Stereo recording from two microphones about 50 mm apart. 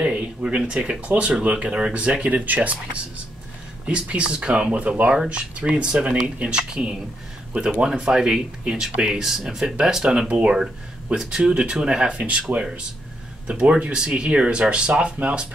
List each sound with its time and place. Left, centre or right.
0.0 s speech: right
13.6 s speech: right